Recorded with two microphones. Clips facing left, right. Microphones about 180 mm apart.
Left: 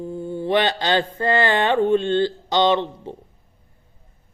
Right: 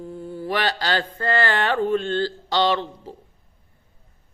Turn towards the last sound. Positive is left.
turn(degrees=20)  # may be behind; listen again after turning